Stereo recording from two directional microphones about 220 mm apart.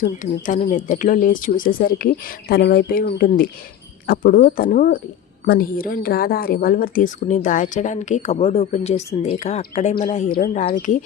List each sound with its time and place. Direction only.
0.0 s speech: 35° left (ahead or behind)